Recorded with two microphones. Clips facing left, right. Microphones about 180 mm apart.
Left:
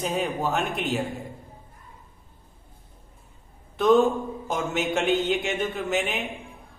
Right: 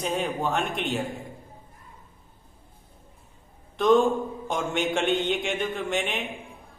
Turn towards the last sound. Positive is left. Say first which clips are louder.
# left 1 dB
turn(degrees=0)  # may be behind; listen again after turning